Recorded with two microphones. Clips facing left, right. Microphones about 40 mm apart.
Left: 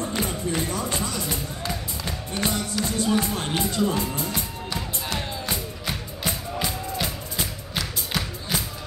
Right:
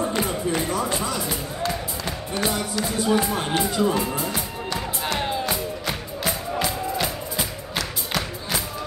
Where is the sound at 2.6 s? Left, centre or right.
Centre.